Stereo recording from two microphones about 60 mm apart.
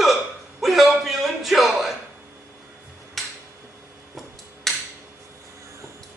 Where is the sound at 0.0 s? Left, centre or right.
Centre.